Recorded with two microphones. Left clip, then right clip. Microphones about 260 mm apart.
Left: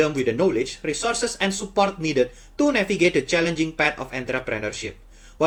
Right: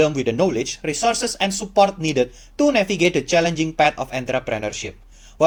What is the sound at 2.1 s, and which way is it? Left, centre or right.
Speech, right.